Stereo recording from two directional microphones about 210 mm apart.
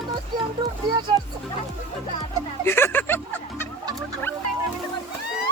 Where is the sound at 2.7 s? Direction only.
10° left (ahead or behind).